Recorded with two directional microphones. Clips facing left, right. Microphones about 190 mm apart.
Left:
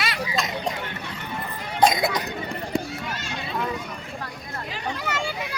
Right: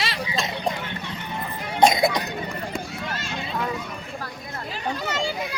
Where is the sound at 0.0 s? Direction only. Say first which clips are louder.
Even; 25° right (ahead or behind).